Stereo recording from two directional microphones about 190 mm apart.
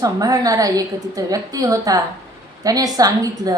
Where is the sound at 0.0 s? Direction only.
20° right (ahead or behind).